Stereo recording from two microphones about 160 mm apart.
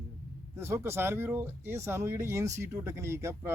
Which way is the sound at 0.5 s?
15° right (ahead or behind).